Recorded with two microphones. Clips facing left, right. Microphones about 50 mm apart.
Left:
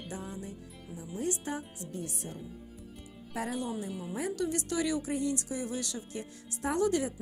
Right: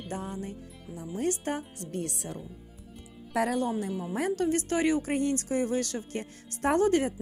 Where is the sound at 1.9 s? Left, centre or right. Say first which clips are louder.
Right 6 dB; right.